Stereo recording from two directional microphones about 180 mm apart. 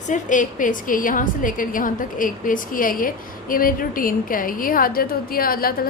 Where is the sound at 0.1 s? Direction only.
45° left (ahead or behind).